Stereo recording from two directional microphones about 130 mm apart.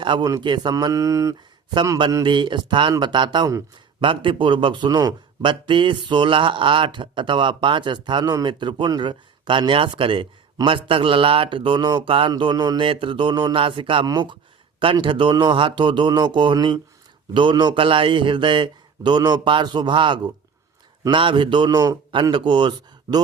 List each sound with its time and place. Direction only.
0.0 s speech: 35° right (ahead or behind)
2.2 s a man's voice: 40° right (ahead or behind)